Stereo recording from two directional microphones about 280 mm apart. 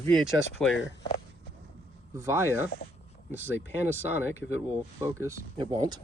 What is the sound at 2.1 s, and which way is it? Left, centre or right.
Speech, centre.